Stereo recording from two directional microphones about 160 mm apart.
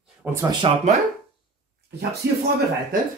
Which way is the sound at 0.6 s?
35° right (ahead or behind).